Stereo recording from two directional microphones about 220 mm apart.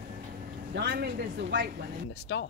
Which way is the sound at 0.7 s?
50° right (ahead or behind).